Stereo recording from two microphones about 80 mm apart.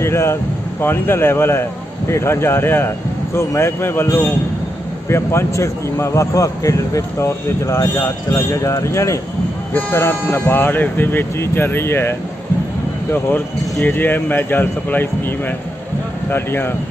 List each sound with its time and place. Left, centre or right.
0.0 s a man's voice: left
9.8 s speech: left